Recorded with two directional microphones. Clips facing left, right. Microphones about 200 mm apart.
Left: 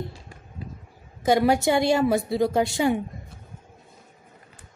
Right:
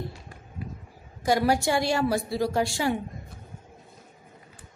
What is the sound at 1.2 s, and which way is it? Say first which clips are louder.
A woman's voice: left 3 dB; 20° left (ahead or behind).